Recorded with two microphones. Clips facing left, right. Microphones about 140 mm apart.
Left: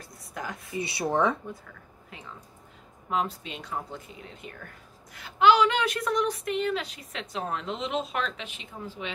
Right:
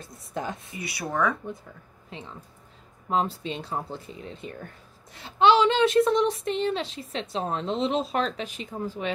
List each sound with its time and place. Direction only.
0.0 s speech: 25° right (ahead or behind)
0.7 s speech: 25° left (ahead or behind)
2.1 s speech: 25° right (ahead or behind)